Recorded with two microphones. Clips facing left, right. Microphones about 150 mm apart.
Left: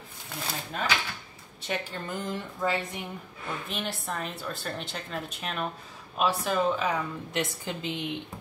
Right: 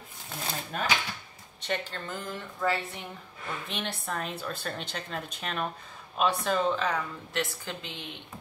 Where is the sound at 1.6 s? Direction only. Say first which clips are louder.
Even; 10° left (ahead or behind).